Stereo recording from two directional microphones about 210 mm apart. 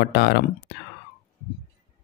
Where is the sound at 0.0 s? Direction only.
50° left (ahead or behind).